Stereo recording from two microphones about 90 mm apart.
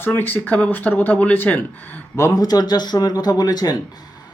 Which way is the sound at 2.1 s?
40° left (ahead or behind).